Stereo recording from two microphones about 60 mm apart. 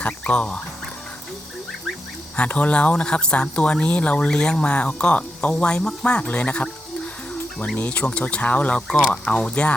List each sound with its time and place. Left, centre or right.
0.0 s speech: centre
2.3 s speech: left
5.1 s speech: left
7.8 s speech: left